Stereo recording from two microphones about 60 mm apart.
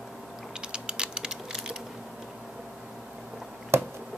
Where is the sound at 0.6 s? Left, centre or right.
Centre.